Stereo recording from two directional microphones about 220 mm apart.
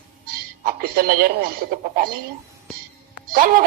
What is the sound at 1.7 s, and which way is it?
Speech, 40° right (ahead or behind).